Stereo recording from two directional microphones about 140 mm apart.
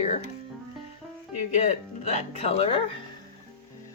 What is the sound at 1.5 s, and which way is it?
Speech, 55° left (ahead or behind).